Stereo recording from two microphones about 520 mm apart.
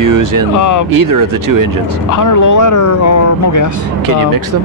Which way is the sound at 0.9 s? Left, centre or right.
Right.